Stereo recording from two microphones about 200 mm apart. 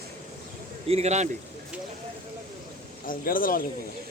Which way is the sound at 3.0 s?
45° left (ahead or behind).